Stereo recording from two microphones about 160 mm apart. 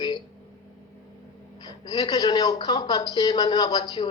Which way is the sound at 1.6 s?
25° left (ahead or behind).